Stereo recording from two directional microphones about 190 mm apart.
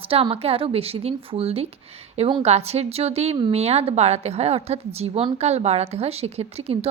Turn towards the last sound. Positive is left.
turn(degrees=-30)  # may be behind; listen again after turning